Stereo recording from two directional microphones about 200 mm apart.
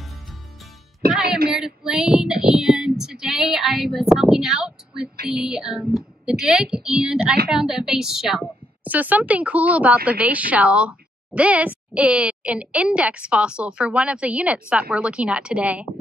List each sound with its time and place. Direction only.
1.5 s child singing: 5° right (ahead or behind)
5.3 s a woman's voice: 5° right (ahead or behind)